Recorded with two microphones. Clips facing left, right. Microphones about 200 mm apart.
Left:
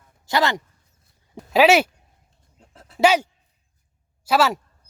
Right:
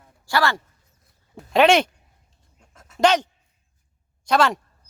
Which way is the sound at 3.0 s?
10° left (ahead or behind).